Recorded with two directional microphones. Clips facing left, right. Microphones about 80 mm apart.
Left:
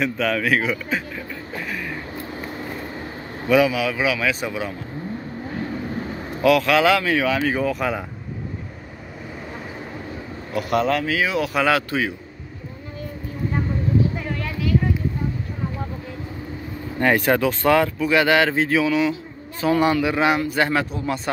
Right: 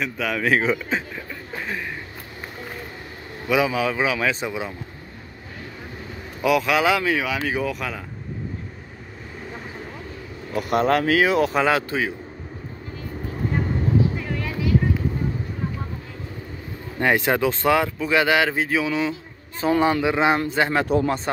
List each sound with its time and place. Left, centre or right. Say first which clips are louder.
0.0 s a man's voice: left 4 dB; centre
0.4 s speech: right 1 dB; right
3.4 s speech: left 4 dB; centre
3.7 s speech: even; right
4.5 s speech: left 1 dB; right
6.4 s speech: left 3 dB; centre
7.3 s speech: left 3 dB; centre
10.7 s speech: right 2 dB; right
11.5 s speech: left 1 dB; right
17.0 s speech: left 1 dB; centre